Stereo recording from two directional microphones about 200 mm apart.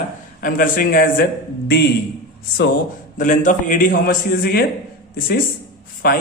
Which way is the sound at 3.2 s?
40° left (ahead or behind).